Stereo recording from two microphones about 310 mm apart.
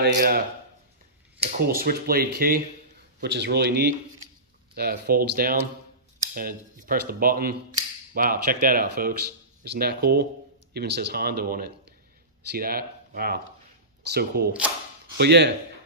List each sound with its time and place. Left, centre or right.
0.0 s speech: right
1.4 s speech: right